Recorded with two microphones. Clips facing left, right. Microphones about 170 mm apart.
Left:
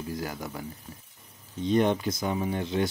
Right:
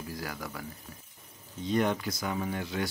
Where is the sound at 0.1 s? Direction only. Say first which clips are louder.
Left 4 dB; 25° left (ahead or behind).